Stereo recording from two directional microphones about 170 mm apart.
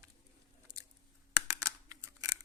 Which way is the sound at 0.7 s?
25° right (ahead or behind).